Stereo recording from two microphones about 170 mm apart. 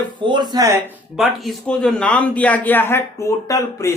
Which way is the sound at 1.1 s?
Centre (ahead or behind).